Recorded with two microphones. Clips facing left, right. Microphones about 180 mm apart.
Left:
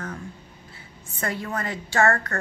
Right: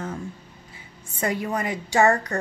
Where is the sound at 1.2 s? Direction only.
15° right (ahead or behind).